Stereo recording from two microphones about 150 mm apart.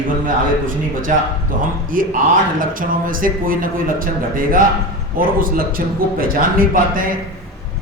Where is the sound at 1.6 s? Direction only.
65° right (ahead or behind).